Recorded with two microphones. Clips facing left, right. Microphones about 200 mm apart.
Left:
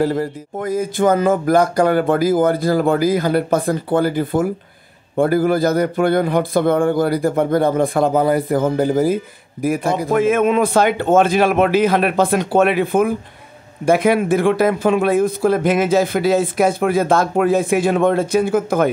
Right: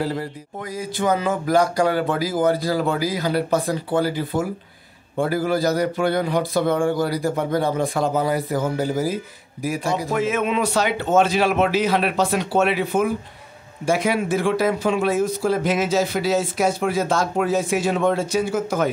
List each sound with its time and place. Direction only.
0.0 s speech: 45° left (ahead or behind)